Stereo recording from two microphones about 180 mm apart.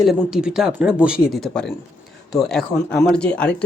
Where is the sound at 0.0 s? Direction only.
Centre (ahead or behind).